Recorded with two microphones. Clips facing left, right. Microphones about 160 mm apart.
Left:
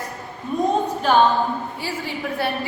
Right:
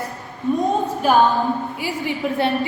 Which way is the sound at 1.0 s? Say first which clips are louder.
Right 2 dB; 5° right (ahead or behind).